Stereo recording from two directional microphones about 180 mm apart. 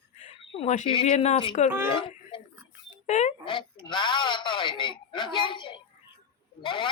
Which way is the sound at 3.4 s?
25° left (ahead or behind).